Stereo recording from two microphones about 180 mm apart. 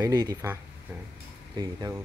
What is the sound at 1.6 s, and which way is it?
Speech, 20° right (ahead or behind).